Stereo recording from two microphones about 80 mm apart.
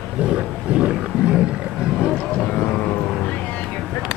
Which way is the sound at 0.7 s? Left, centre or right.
Centre.